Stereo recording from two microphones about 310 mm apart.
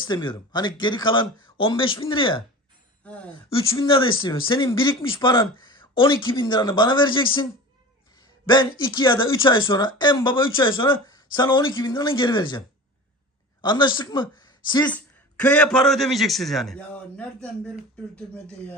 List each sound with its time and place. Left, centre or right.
0.0 s speech: centre
3.0 s speech: centre
3.5 s speech: centre
8.4 s speech: centre